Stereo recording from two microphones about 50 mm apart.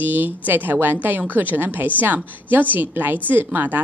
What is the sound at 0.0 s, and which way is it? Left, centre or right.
A woman's voice, right.